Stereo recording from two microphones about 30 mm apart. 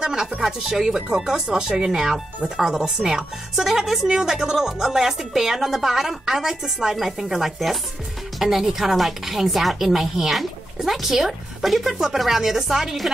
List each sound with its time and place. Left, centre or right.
0.0 s a woman's voice: centre